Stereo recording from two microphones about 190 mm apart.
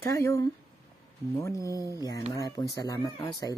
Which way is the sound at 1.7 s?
20° right (ahead or behind).